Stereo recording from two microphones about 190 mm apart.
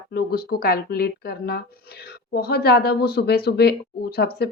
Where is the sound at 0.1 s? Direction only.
55° left (ahead or behind).